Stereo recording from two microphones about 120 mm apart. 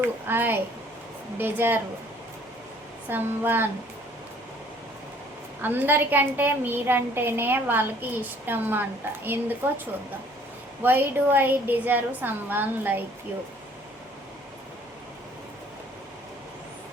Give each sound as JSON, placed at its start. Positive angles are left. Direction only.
{"t": 0.3, "sound": "a woman's voice", "side_deg": -15}
{"t": 3.1, "sound": "a woman's voice", "side_deg": -15}
{"t": 5.6, "sound": "a woman's voice", "side_deg": -15}
{"t": 10.8, "sound": "a woman's voice", "side_deg": -15}